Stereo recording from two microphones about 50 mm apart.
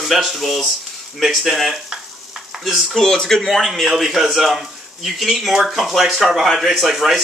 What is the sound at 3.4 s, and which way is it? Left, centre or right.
Speech, centre.